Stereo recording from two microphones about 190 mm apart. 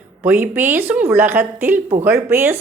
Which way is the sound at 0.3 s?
10° right (ahead or behind).